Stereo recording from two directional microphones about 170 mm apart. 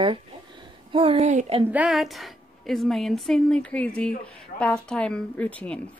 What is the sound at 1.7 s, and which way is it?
A woman's voice, 5° right (ahead or behind).